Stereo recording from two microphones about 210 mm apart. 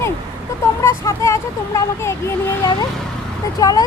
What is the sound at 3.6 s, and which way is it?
Speech, 15° left (ahead or behind).